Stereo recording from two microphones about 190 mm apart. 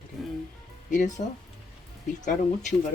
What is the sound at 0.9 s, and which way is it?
Speech, 40° left (ahead or behind).